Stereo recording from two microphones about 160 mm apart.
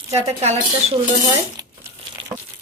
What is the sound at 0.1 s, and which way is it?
Speech, 40° right (ahead or behind).